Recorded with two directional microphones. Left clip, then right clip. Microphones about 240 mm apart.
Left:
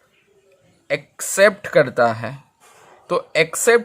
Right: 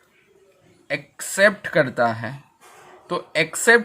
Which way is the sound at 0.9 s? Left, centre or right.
Left.